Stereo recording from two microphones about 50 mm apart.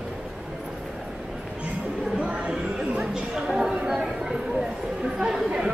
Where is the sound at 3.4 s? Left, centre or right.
Centre.